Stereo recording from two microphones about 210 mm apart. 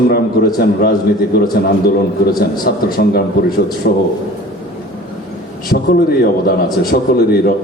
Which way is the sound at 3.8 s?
50° left (ahead or behind).